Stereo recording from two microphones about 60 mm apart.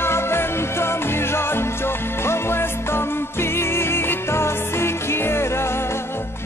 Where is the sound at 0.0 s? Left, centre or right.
Left.